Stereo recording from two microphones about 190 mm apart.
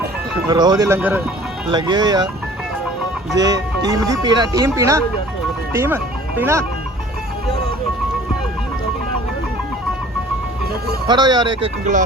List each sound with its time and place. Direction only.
0.4 s speech: 20° right (ahead or behind)
1.7 s speech: 20° right (ahead or behind)
3.3 s speech: 20° right (ahead or behind)
11.1 s speech: 20° right (ahead or behind)